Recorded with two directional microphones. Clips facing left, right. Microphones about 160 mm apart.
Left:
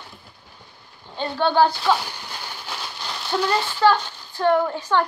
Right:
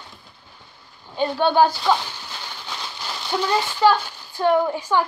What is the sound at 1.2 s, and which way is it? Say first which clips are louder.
Speech: right 1 dB; 15° right (ahead or behind).